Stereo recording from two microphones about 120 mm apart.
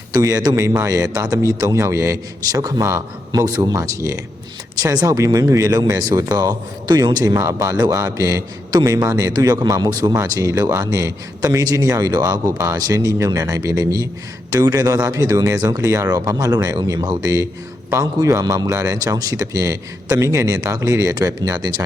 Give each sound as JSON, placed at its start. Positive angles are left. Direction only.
{"t": 0.1, "sound": "a man's voice", "side_deg": -30}